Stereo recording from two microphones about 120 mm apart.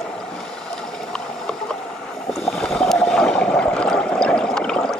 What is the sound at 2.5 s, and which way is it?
Water, centre (ahead or behind).